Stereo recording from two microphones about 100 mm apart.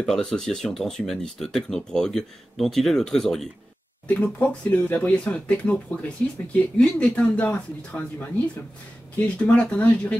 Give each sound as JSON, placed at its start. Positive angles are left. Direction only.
{"t": 0.0, "sound": "speech", "side_deg": 5}
{"t": 9.4, "sound": "speech", "side_deg": 15}